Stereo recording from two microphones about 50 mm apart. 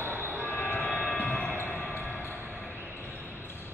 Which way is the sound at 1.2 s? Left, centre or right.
Left.